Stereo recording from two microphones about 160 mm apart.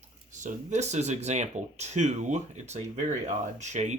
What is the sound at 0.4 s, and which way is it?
Speech, 45° right (ahead or behind).